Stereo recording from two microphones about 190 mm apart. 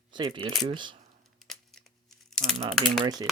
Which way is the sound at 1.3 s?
Centre (ahead or behind).